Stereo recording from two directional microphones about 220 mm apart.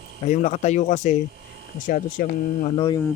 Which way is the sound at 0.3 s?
30° left (ahead or behind).